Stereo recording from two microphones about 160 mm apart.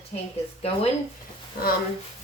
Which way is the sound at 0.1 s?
45° left (ahead or behind).